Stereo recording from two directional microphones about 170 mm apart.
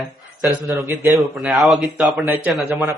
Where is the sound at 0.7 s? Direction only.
20° right (ahead or behind).